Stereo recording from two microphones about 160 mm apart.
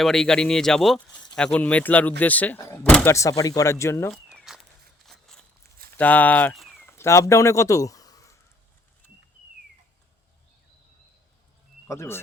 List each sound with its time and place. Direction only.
0.0 s speech: 5° left (ahead or behind)
4.1 s walk: centre (ahead or behind)
6.0 s speech: 10° left (ahead or behind)
6.8 s a sound: 15° left (ahead or behind)
11.9 s speech: 15° left (ahead or behind)